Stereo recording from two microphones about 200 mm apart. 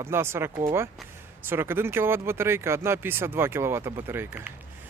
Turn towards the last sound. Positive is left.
turn(degrees=-10)  # may be behind; listen again after turning